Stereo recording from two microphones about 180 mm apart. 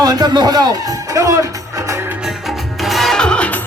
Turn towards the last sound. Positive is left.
turn(degrees=5)  # may be behind; listen again after turning